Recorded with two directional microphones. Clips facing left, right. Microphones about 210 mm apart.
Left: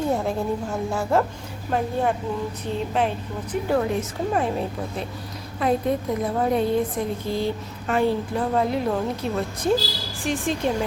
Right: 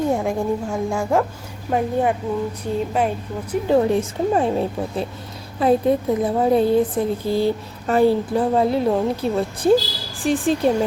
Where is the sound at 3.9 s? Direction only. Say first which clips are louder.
Right 5 dB; 30° right (ahead or behind).